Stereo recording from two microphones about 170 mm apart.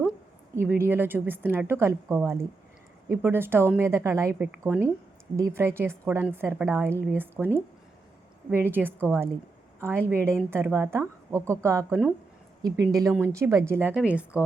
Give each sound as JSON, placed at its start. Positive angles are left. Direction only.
{"t": 0.0, "sound": "a woman's voice", "side_deg": -10}